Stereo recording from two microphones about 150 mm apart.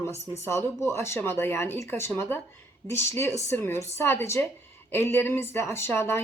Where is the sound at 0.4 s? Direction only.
15° left (ahead or behind).